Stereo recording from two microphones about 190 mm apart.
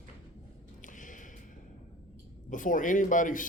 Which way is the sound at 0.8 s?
45° left (ahead or behind).